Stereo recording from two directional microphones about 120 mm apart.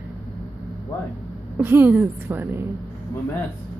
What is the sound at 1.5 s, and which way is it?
A woman's voice, 15° right (ahead or behind).